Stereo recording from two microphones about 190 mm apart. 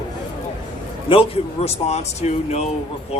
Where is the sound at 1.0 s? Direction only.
30° left (ahead or behind).